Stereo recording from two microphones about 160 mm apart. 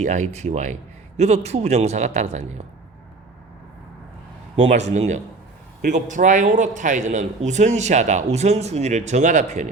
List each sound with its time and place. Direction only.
0.0 s a man's voice: 50° right (ahead or behind)
4.6 s a man's voice: 45° right (ahead or behind)